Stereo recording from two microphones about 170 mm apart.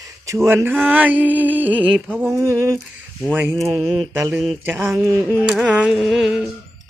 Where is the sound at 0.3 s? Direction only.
15° right (ahead or behind).